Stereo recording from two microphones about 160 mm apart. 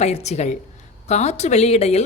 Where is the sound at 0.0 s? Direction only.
45° left (ahead or behind).